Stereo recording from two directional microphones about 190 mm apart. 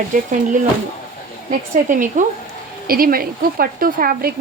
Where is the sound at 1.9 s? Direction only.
45° right (ahead or behind).